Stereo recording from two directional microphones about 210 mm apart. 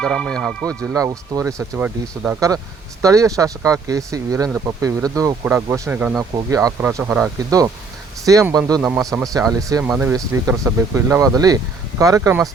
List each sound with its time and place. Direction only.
0.0 s speech: centre (ahead or behind)
0.9 s speech: 15° right (ahead or behind)
8.8 s speech: 5° right (ahead or behind)
9.3 s speech: 15° right (ahead or behind)